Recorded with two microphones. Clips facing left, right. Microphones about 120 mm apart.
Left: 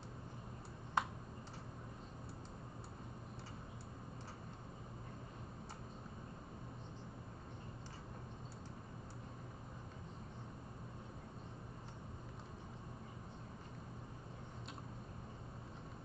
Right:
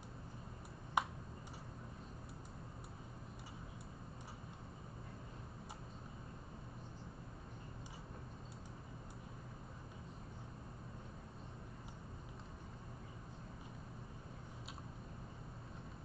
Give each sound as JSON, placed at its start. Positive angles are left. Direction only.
{"t": 1.0, "sound": "tick-tock", "side_deg": -10}